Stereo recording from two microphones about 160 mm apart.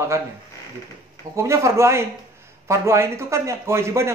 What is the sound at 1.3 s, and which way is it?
A man's voice, 20° right (ahead or behind).